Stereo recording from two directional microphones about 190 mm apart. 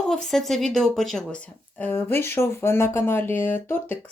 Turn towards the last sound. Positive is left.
turn(degrees=10)  # may be behind; listen again after turning